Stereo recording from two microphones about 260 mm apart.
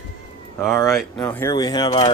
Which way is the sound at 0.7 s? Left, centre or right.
Centre.